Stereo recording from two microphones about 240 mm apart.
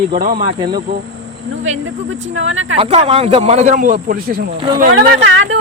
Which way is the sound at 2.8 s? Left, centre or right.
Right.